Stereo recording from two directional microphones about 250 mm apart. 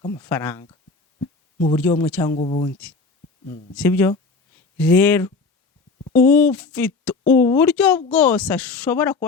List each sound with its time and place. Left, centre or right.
0.0 s speech: centre
1.2 s a sound: left
1.9 s speech: centre
2.3 s speech: left
3.4 s speech: centre